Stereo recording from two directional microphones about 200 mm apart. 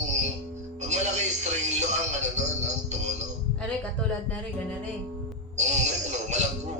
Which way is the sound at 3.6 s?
5° left (ahead or behind).